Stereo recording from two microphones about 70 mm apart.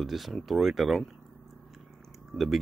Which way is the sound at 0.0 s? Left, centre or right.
Centre.